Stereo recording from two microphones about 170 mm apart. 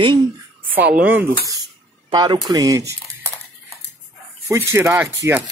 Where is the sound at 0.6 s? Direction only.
10° right (ahead or behind).